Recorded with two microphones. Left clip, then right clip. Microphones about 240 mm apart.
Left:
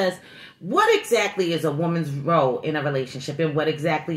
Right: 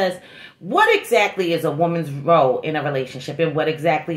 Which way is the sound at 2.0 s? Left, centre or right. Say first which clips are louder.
Right 4 dB; right.